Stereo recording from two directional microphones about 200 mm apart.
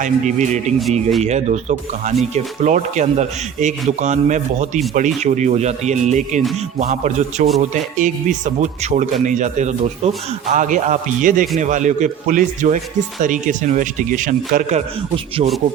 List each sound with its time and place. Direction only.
0.0 s a man's voice: 40° right (ahead or behind)